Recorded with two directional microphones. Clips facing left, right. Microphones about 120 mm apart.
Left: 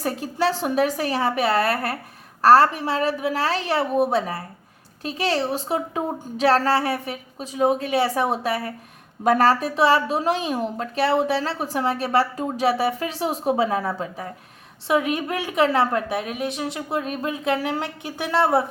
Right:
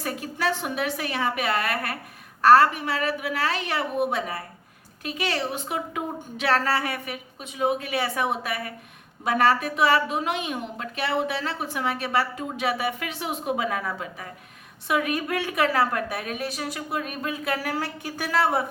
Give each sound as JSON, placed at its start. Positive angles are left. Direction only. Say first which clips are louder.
{"t": 0.0, "sound": "a woman's voice", "louder": "left 5 dB", "side_deg": 30}